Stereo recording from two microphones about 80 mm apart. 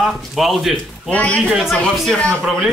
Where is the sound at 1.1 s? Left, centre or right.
Centre.